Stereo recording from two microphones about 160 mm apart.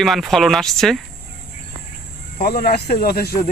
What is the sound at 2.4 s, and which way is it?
Speech, 65° left (ahead or behind).